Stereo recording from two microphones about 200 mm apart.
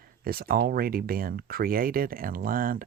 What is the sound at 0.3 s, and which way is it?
Speech, 50° right (ahead or behind).